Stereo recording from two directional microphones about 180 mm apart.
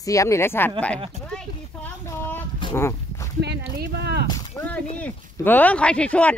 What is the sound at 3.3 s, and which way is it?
Speech, 65° right (ahead or behind).